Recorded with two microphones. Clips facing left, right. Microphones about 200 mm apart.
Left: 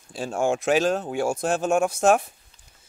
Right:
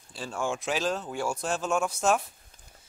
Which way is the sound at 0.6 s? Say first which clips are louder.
Left 8 dB; 70° left (ahead or behind).